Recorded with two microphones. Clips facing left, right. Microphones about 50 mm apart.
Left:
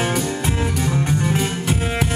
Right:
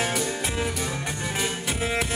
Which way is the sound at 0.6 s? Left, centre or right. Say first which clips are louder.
Left 6 dB; centre.